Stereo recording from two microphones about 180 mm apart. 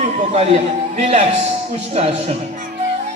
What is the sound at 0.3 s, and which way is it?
Speech, 35° right (ahead or behind).